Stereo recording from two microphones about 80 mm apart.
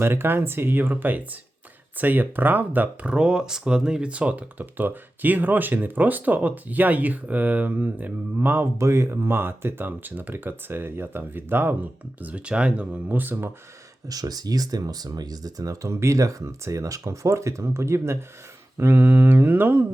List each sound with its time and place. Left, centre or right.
0.0 s speech: right
8.8 s speech: right
14.1 s speech: right